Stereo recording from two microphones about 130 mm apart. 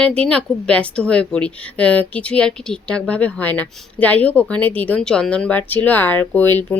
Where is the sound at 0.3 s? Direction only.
10° left (ahead or behind).